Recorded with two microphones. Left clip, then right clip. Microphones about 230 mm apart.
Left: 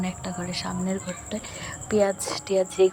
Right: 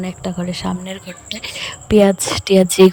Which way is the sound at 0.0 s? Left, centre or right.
Centre.